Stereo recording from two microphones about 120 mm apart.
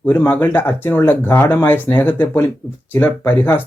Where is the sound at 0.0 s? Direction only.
15° left (ahead or behind).